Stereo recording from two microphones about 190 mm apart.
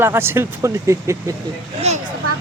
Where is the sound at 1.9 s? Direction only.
35° right (ahead or behind).